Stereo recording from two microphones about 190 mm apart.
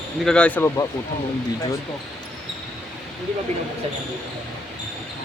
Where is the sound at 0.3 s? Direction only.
5° left (ahead or behind).